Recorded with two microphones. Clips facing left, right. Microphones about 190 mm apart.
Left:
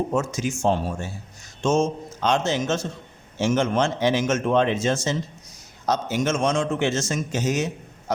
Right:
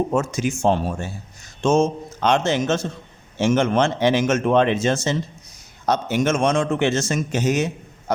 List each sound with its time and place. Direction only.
0.1 s a man's voice: 55° right (ahead or behind)